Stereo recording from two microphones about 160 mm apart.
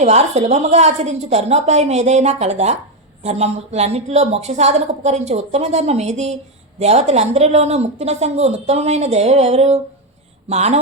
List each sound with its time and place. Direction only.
0.0 s a woman's voice: 40° right (ahead or behind)